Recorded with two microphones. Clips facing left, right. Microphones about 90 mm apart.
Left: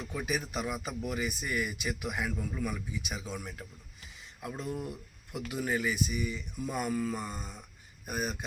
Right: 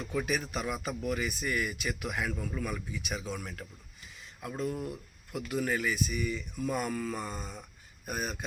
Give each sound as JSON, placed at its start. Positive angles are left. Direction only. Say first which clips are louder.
{"t": 0.0, "sound": "speech", "louder": "right 2 dB", "side_deg": 10}